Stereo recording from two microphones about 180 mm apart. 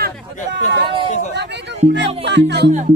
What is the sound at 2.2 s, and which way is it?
Music, 75° right (ahead or behind).